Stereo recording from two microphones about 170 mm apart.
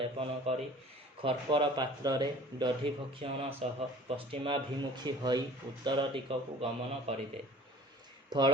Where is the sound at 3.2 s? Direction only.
35° right (ahead or behind).